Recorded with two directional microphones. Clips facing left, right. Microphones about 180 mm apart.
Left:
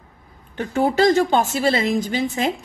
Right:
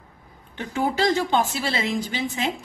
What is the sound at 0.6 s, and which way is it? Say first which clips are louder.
A woman's voice: left 6 dB; 45° left (ahead or behind).